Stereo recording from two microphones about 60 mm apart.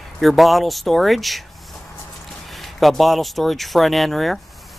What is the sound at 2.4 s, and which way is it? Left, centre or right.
Speech, centre.